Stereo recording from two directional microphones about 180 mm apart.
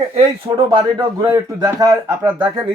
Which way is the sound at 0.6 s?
20° right (ahead or behind).